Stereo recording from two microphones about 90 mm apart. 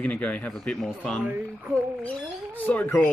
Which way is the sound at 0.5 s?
5° left (ahead or behind).